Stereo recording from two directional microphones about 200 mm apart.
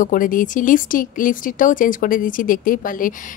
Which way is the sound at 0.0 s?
45° left (ahead or behind).